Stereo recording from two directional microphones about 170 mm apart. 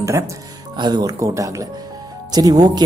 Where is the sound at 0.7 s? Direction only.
25° right (ahead or behind).